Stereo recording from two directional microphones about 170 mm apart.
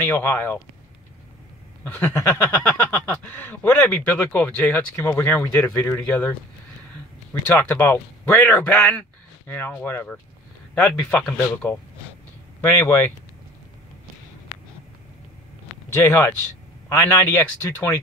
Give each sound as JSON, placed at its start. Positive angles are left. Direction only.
{"t": 0.1, "sound": "speech", "side_deg": 10}
{"t": 1.9, "sound": "speech", "side_deg": 15}
{"t": 7.4, "sound": "speech", "side_deg": 10}
{"t": 15.9, "sound": "speech", "side_deg": 15}